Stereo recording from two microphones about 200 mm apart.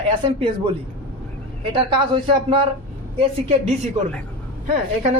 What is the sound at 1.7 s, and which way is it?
Speech, 25° right (ahead or behind).